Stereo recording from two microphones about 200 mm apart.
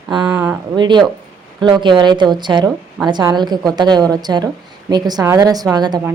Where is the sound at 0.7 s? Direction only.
20° right (ahead or behind).